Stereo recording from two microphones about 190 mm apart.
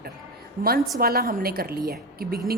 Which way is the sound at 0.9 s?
55° right (ahead or behind).